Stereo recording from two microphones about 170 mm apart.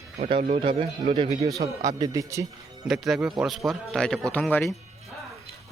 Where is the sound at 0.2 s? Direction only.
30° right (ahead or behind).